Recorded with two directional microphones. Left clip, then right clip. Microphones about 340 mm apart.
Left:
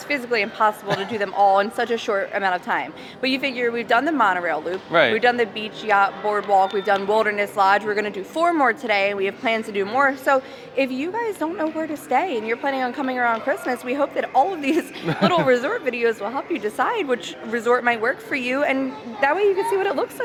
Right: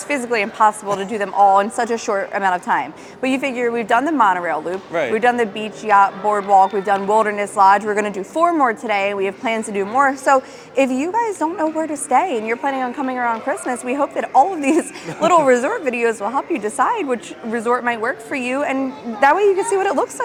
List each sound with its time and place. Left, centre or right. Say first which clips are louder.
0.1 s speech: right 3 dB; right
4.9 s a man's voice: left 5 dB; left
5.1 s speech: right 2 dB; right
19.2 s speech: right 5 dB; right